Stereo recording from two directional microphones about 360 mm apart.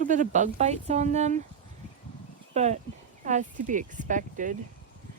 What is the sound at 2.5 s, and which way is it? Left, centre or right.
Speech, centre.